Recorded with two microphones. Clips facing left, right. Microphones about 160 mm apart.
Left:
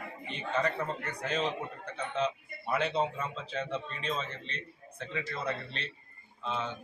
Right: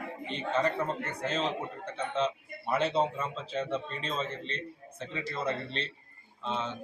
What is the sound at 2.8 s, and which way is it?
A man's voice, 30° right (ahead or behind).